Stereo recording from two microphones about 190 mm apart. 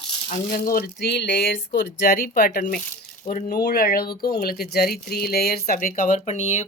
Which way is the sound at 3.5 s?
55° left (ahead or behind).